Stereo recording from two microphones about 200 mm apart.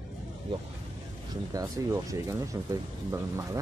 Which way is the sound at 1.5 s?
15° right (ahead or behind).